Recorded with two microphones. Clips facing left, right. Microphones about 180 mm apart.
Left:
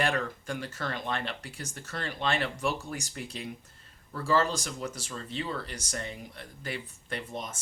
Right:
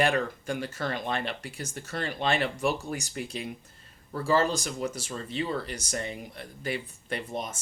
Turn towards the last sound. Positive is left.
turn(degrees=-15)  # may be behind; listen again after turning